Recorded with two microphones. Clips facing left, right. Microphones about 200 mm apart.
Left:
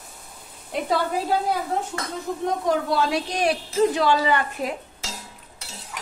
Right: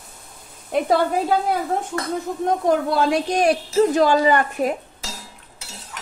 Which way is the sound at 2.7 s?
55° right (ahead or behind).